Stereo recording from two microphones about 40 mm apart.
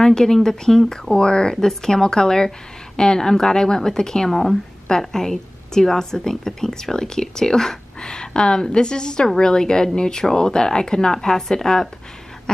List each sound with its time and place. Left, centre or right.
0.0 s speech: centre